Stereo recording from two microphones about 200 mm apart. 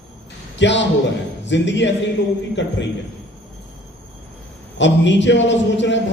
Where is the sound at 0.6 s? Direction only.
65° left (ahead or behind).